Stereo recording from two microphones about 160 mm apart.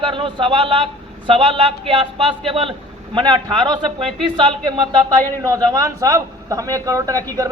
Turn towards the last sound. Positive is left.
turn(degrees=-20)  # may be behind; listen again after turning